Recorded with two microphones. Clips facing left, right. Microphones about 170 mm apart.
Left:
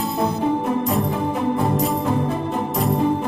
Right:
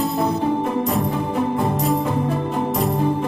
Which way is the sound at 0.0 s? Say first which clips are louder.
Right 1 dB; centre (ahead or behind).